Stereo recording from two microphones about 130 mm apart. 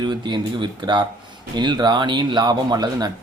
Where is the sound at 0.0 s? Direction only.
35° right (ahead or behind).